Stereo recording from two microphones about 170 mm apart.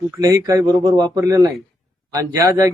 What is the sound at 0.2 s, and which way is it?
Speech, 20° right (ahead or behind).